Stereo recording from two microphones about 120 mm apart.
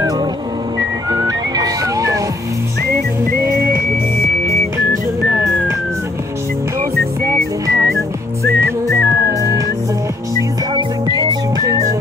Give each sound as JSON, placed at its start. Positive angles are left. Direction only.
{"t": 0.7, "sound": "whistling", "side_deg": -35}
{"t": 3.4, "sound": "music", "side_deg": -20}
{"t": 7.2, "sound": "music", "side_deg": -25}
{"t": 10.7, "sound": "music", "side_deg": -35}